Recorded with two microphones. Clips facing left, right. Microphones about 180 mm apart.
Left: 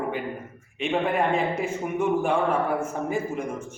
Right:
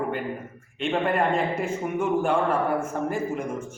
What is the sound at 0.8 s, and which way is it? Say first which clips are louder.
A man's voice: even; 5° left (ahead or behind).